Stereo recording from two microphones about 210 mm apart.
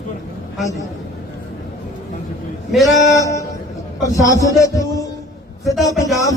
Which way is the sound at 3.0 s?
15° left (ahead or behind).